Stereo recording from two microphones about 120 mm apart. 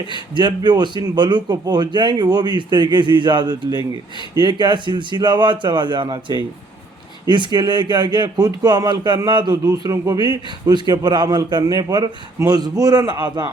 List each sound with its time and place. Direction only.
0.3 s speech: 40° right (ahead or behind)